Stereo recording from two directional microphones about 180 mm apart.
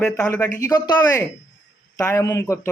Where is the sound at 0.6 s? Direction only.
20° left (ahead or behind).